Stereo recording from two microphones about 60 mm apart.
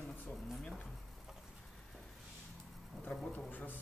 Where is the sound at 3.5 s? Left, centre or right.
Left.